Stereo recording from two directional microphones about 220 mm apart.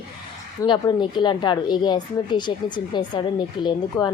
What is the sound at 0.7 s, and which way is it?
A woman's voice, 20° left (ahead or behind).